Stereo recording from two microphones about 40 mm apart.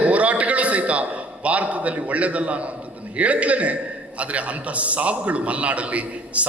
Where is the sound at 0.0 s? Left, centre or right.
Right.